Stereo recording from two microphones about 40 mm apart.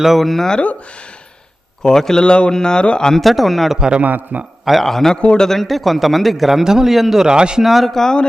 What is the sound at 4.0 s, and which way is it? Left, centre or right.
Speech, right.